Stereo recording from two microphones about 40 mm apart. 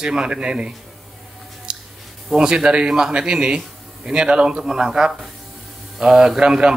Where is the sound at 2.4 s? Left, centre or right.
Right.